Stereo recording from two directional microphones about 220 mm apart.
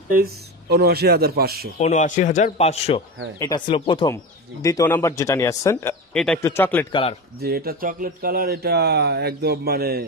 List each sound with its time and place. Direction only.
0.1 s speech: 45° right (ahead or behind)
1.8 s speech: 30° left (ahead or behind)
3.3 s speech: 20° left (ahead or behind)
6.1 s speech: 5° left (ahead or behind)
6.9 s speech: 25° left (ahead or behind)
7.3 s speech: 45° right (ahead or behind)